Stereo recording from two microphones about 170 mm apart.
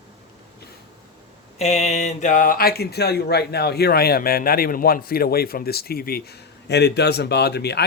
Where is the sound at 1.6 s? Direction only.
40° left (ahead or behind).